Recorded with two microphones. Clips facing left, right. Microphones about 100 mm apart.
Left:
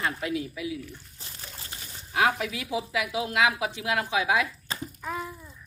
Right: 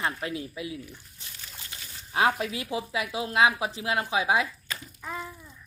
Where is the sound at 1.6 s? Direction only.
35° left (ahead or behind).